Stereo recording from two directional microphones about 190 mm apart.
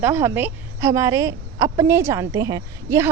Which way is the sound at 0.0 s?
15° right (ahead or behind).